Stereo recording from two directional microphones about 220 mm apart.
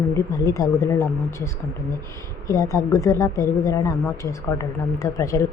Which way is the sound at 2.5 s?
15° left (ahead or behind).